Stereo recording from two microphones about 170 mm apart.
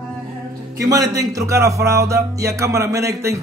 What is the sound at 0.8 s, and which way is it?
Speech, 20° right (ahead or behind).